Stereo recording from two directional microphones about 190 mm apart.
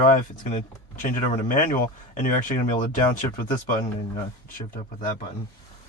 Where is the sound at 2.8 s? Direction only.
45° left (ahead or behind).